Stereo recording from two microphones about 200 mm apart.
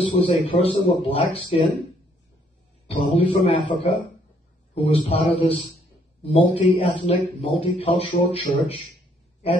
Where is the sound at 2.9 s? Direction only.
30° left (ahead or behind).